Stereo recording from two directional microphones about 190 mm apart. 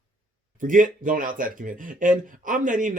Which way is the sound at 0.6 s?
45° right (ahead or behind).